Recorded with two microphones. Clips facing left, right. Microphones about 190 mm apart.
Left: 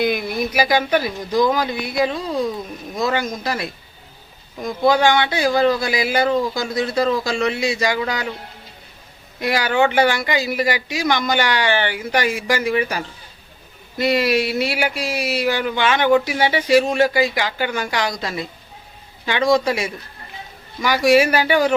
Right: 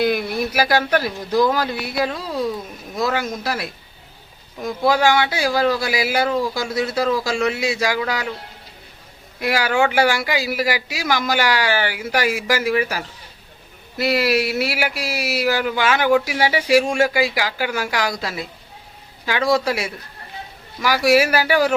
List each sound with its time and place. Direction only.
0.0 s speech: 5° right (ahead or behind)
0.9 s speech: 10° left (ahead or behind)
1.2 s speech: 10° right (ahead or behind)
9.4 s speech: 5° right (ahead or behind)